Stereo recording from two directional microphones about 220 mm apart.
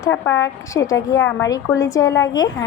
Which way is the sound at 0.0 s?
10° left (ahead or behind).